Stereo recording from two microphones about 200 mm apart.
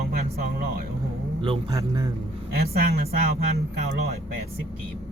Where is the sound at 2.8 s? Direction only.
50° right (ahead or behind).